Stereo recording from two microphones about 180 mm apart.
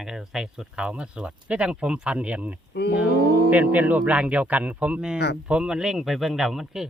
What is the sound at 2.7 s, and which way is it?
Speech, 70° left (ahead or behind).